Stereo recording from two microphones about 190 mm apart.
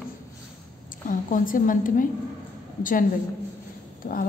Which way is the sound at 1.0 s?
45° left (ahead or behind).